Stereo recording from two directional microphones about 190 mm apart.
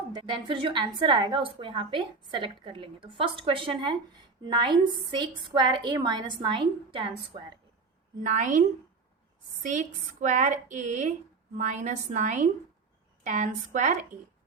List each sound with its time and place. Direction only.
0.1 s a woman's voice: 25° right (ahead or behind)
8.2 s speech: 40° right (ahead or behind)
9.6 s speech: 40° right (ahead or behind)